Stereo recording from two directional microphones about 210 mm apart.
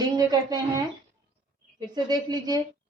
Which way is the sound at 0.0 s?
20° right (ahead or behind).